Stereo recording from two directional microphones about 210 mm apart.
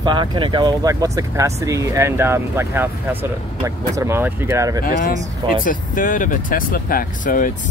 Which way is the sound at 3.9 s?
10° right (ahead or behind).